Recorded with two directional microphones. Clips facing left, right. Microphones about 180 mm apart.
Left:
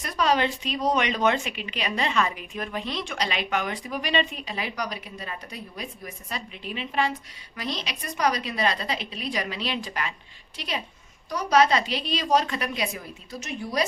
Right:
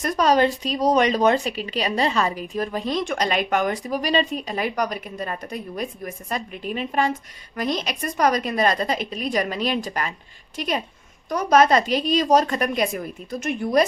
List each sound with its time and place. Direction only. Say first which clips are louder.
0.0 s a woman's voice: right 5 dB; 45° right (ahead or behind)